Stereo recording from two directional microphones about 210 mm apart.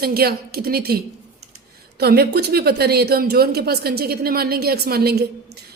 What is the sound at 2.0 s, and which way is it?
A woman's voice, 50° right (ahead or behind).